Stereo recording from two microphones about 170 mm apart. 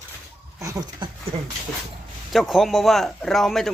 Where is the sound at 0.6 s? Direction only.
20° right (ahead or behind).